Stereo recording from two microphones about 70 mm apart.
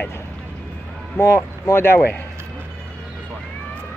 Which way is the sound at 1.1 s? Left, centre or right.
Left.